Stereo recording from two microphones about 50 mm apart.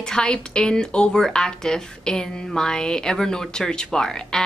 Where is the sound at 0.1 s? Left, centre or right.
Centre.